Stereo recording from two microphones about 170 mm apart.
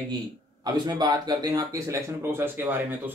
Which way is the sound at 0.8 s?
20° right (ahead or behind).